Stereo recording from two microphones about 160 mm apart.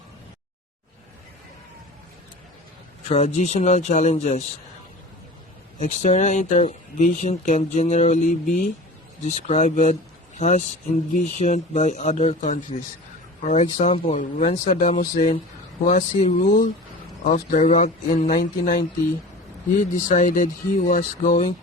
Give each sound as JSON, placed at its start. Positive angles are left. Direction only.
{"t": 3.1, "sound": "speech", "side_deg": 45}
{"t": 5.8, "sound": "speech", "side_deg": 45}
{"t": 9.2, "sound": "speech", "side_deg": 45}
{"t": 20.1, "sound": "speech", "side_deg": 55}